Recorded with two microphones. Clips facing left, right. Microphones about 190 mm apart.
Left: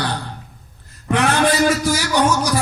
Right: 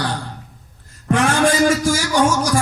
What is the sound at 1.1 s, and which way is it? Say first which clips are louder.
A man's voice: right 1 dB; 45° right (ahead or behind).